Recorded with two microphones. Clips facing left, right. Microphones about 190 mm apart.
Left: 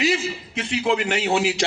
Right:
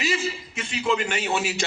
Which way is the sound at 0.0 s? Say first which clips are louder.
Left 4 dB; 65° left (ahead or behind).